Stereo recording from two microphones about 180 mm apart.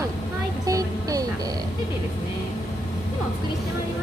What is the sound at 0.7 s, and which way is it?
Music, 20° right (ahead or behind).